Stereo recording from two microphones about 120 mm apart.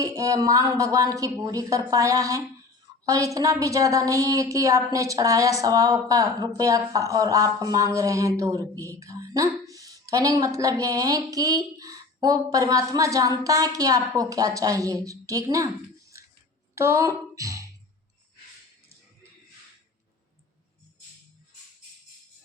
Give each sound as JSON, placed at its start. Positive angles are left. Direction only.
{"t": 0.0, "sound": "a woman's voice", "side_deg": -25}